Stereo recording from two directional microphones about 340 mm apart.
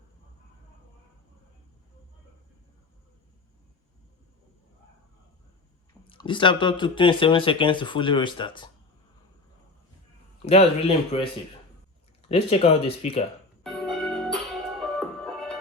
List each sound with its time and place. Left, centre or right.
6.1 s speech: centre
10.4 s speech: centre
12.5 s speech: centre
13.7 s music: centre